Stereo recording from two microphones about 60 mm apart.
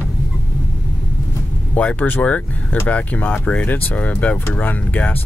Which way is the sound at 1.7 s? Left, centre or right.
Left.